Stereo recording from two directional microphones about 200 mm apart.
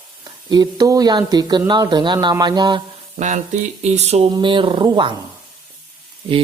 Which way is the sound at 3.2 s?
35° right (ahead or behind).